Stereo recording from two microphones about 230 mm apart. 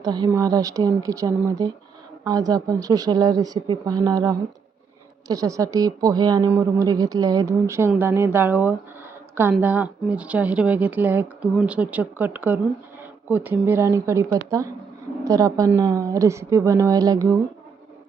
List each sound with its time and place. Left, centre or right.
0.0 s a woman's voice: centre